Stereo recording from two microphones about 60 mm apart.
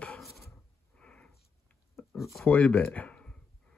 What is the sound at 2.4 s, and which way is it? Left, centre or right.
Speech, left.